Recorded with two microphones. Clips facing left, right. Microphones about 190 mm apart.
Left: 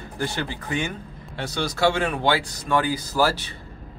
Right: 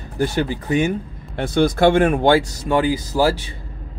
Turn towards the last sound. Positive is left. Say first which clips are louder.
# right 4 dB
turn(degrees=-20)  # may be behind; listen again after turning